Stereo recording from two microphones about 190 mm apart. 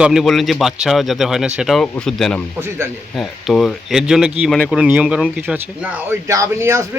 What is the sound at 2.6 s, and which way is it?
Speech, 10° right (ahead or behind).